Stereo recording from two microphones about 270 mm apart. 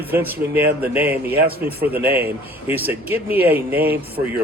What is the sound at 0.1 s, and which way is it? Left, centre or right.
Speech, centre.